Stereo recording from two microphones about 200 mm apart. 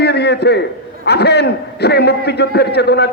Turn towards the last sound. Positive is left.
turn(degrees=55)  # may be behind; listen again after turning